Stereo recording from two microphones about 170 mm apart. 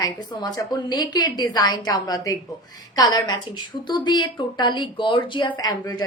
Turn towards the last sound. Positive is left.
turn(degrees=25)  # may be behind; listen again after turning